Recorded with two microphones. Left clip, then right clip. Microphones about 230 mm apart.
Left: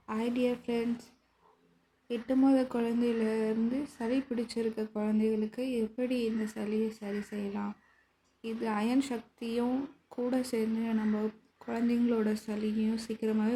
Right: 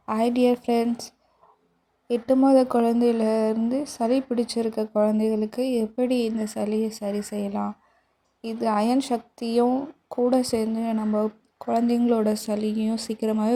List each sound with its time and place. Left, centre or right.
0.0 s speech: right
2.0 s speech: right